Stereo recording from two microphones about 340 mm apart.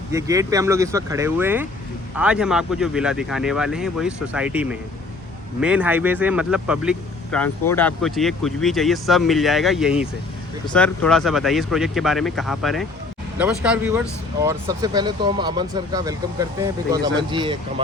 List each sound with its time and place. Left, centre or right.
0.1 s speech: centre